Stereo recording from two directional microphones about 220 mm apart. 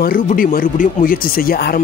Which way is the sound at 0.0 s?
40° left (ahead or behind).